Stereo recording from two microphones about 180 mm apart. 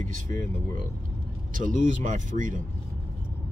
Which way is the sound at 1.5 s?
45° right (ahead or behind).